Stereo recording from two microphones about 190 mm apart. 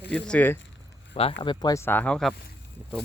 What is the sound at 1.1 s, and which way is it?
Speech, 30° left (ahead or behind).